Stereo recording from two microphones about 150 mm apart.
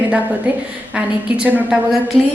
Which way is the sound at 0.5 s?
10° right (ahead or behind).